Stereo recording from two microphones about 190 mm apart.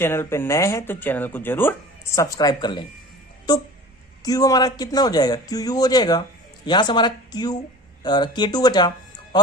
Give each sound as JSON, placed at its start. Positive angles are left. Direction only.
{"t": 0.0, "sound": "speech", "side_deg": 15}
{"t": 4.2, "sound": "speech", "side_deg": 20}